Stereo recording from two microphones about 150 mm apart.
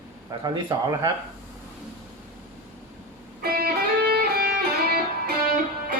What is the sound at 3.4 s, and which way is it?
Music, 90° right.